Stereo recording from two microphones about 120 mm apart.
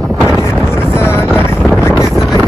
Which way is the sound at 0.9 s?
20° left (ahead or behind).